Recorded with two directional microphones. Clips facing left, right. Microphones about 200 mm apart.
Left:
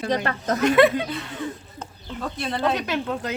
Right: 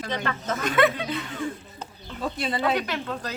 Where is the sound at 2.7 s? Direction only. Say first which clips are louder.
Left 3 dB; 25° left (ahead or behind).